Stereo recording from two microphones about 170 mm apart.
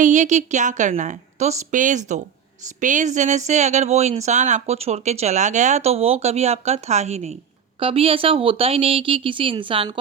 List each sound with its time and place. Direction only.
0.0 s a woman's voice: 45° right (ahead or behind); by 10.0 s 30° right (ahead or behind)